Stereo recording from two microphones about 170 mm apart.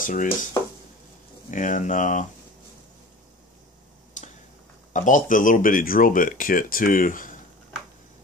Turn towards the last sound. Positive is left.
turn(degrees=50)  # may be behind; listen again after turning